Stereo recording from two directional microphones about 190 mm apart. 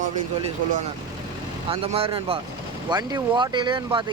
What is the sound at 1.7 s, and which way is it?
Speech, 30° right (ahead or behind).